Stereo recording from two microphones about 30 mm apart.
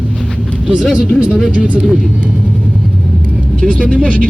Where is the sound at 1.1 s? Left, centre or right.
Right.